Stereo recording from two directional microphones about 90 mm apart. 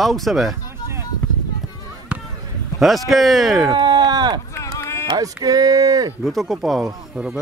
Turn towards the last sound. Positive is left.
turn(degrees=-10)  # may be behind; listen again after turning